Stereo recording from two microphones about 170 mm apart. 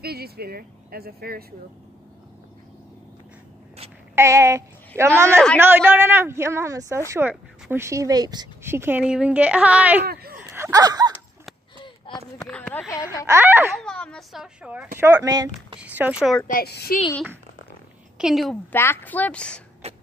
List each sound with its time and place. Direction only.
0.0 s speech: 65° right (ahead or behind)
4.1 s speech: 15° right (ahead or behind)
10.0 s speech: 65° right (ahead or behind)
10.3 s a sound: 15° right (ahead or behind)
12.4 s a woman's voice: 5° left (ahead or behind)
12.9 s speech: 20° left (ahead or behind)
13.3 s speech: 15° right (ahead or behind)
13.8 s speech: 5° left (ahead or behind); by 15.3 s 10° right (ahead or behind)
15.3 s speech: 25° right (ahead or behind)
15.8 s speech: 5° right (ahead or behind)
16.4 s a child's voice: 65° left (ahead or behind)
18.1 s a woman's voice: 5° right (ahead or behind)
18.7 s a woman's voice: 10° left (ahead or behind)
19.8 s a sound: 40° right (ahead or behind)